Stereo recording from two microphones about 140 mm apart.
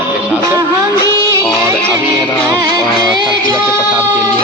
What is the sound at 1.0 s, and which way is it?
Music, 25° left (ahead or behind).